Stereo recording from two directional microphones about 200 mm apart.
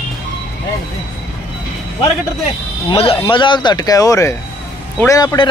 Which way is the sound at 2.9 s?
25° left (ahead or behind).